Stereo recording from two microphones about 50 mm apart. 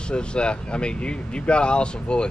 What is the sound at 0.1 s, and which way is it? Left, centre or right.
Speech, centre.